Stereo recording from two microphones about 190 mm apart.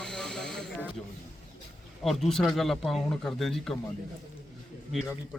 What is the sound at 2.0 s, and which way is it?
A man's voice, centre (ahead or behind).